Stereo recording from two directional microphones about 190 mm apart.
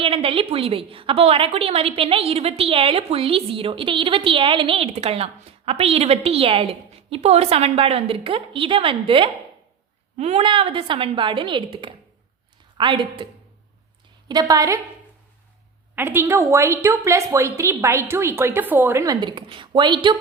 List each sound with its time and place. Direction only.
0.0 s a woman's voice: 30° right (ahead or behind)
14.3 s a woman's voice: 20° right (ahead or behind)
16.0 s a woman's voice: 10° right (ahead or behind)